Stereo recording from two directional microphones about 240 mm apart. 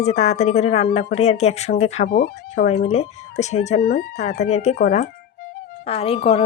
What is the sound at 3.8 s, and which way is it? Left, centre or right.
Speech, left.